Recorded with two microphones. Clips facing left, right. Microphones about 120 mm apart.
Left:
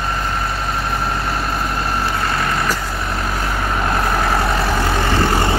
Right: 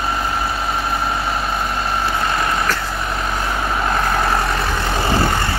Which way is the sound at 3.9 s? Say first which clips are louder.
Even; centre (ahead or behind).